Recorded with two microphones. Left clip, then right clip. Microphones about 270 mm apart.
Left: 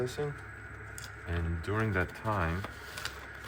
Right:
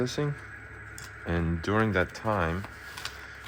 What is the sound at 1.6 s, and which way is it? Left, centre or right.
Speech, centre.